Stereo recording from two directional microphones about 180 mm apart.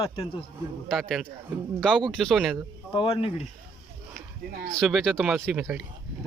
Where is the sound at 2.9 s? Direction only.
30° left (ahead or behind).